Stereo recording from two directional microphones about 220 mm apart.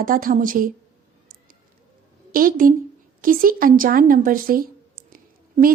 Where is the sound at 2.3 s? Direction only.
40° right (ahead or behind).